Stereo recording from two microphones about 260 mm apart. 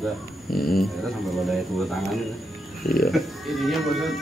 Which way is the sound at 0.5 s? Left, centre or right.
Left.